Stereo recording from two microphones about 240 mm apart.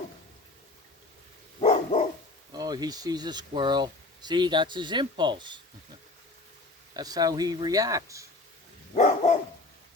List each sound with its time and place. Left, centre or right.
1.6 s dog: left
2.5 s speech: centre
6.9 s speech: centre
9.0 s dog: left